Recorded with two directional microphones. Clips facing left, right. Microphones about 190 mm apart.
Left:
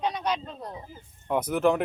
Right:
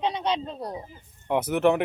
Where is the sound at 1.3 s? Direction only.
5° right (ahead or behind).